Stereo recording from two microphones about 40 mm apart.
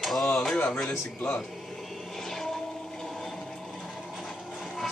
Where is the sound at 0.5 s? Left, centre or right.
Left.